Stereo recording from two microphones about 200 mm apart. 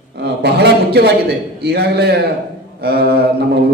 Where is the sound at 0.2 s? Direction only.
55° right (ahead or behind).